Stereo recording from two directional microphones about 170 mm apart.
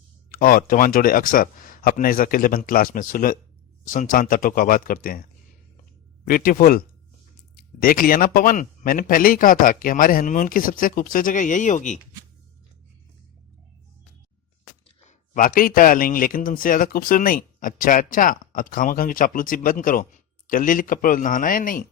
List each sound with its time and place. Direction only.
0.3 s speech: 55° left (ahead or behind)
6.2 s speech: 55° left (ahead or behind)
14.8 s a man's voice: 45° left (ahead or behind)